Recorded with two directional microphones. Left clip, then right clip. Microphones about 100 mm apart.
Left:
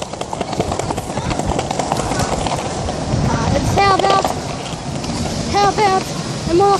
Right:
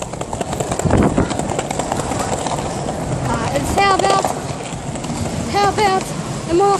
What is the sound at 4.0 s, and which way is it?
Vehicle, 10° right (ahead or behind).